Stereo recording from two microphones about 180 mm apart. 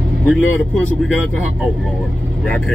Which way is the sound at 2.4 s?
Centre (ahead or behind).